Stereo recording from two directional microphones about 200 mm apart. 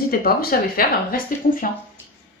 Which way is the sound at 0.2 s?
50° left (ahead or behind).